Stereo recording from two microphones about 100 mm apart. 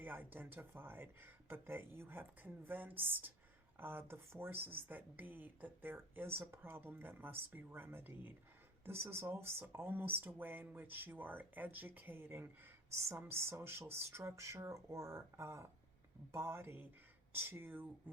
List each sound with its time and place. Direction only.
0.0 s speech: 20° right (ahead or behind)